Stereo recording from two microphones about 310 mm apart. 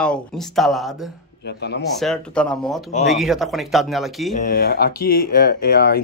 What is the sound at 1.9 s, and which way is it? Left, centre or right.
Speech, centre.